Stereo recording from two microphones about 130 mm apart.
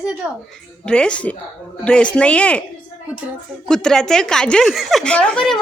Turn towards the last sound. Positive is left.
turn(degrees=5)  # may be behind; listen again after turning